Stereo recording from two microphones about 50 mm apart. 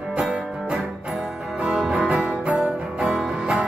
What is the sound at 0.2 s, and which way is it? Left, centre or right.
Music, centre.